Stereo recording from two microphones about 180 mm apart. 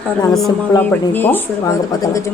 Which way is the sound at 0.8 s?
10° left (ahead or behind).